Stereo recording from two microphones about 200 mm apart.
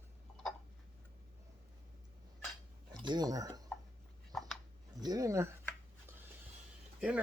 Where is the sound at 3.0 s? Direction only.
20° right (ahead or behind).